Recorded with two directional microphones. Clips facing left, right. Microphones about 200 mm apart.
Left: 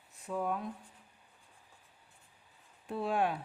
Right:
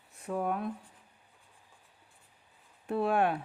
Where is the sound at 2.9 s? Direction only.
60° right (ahead or behind).